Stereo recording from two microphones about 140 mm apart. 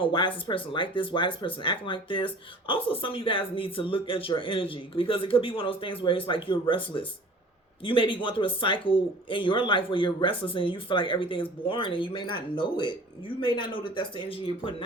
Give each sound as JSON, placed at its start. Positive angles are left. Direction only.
{"t": 0.0, "sound": "speech", "side_deg": 35}